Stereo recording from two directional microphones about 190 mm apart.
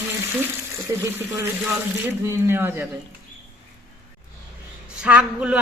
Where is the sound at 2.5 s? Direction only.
10° right (ahead or behind).